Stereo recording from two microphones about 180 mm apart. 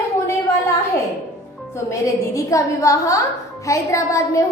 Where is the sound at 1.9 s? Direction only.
15° left (ahead or behind).